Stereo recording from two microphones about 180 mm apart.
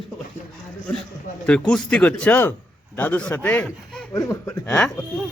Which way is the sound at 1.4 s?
5° left (ahead or behind).